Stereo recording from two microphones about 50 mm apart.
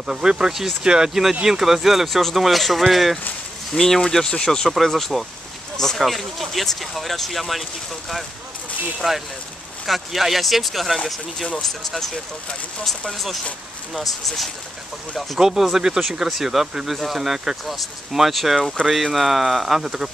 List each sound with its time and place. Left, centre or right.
0.0 s speech: centre
4.6 s speech: centre
9.0 s speech: centre
13.9 s speech: centre
15.1 s speech: centre